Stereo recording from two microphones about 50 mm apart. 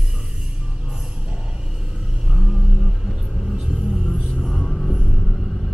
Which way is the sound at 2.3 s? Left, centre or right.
Centre.